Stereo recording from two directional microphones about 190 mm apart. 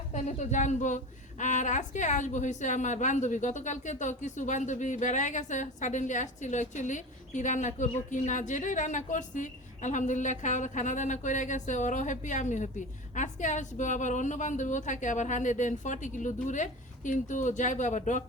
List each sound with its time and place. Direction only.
0.1 s a woman's voice: 40° left (ahead or behind)